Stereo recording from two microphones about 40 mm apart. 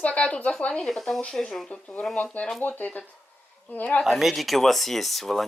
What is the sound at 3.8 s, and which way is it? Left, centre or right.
Speech, left.